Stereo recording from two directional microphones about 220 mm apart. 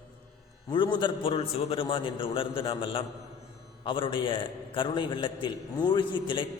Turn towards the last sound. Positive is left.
turn(degrees=20)  # may be behind; listen again after turning